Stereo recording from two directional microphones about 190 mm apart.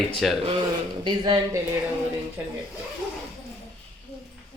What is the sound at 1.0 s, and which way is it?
Speech, 20° right (ahead or behind).